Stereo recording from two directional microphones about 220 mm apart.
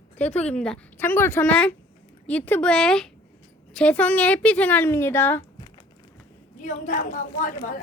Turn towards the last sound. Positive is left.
turn(degrees=40)  # may be behind; listen again after turning